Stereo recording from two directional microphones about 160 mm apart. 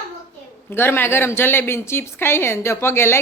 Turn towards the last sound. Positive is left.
turn(degrees=15)  # may be behind; listen again after turning